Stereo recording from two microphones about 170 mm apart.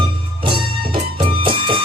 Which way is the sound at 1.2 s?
30° right (ahead or behind).